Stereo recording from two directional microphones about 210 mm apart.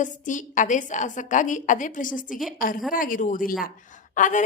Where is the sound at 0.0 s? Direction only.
35° left (ahead or behind).